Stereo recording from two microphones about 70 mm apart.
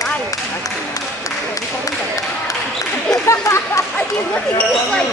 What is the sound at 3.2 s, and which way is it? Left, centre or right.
Chatter, left.